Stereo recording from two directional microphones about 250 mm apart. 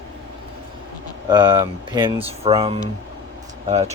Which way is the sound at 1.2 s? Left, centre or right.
Centre.